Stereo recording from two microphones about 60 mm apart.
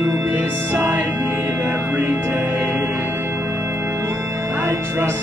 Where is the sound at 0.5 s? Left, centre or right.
Right.